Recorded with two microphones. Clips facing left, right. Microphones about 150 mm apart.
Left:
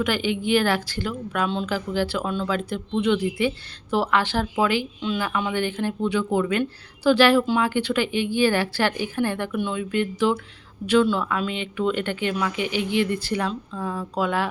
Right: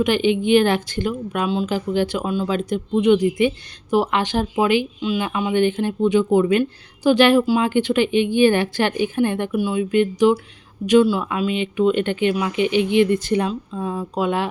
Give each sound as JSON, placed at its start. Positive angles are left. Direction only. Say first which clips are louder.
{"t": 0.0, "sound": "speech", "louder": "right 6 dB", "side_deg": -20}